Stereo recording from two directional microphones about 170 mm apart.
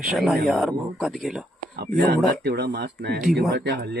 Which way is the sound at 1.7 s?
70° right (ahead or behind).